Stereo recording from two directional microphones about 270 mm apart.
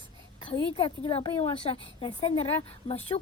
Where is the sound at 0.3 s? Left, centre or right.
Centre.